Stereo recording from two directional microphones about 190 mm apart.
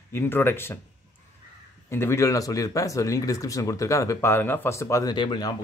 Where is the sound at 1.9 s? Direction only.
15° left (ahead or behind).